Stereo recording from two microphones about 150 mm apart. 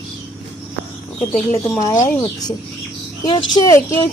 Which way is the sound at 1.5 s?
25° left (ahead or behind).